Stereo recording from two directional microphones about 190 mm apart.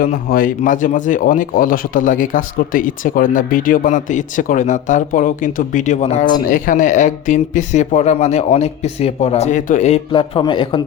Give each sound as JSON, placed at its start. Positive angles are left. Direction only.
{"t": 0.0, "sound": "speech", "side_deg": 50}